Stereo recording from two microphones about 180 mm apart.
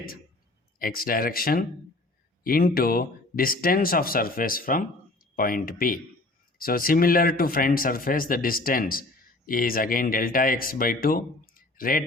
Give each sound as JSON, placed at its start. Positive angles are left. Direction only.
{"t": 0.8, "sound": "speech", "side_deg": 55}